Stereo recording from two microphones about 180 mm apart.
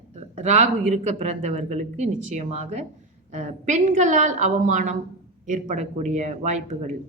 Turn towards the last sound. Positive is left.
turn(degrees=-40)  # may be behind; listen again after turning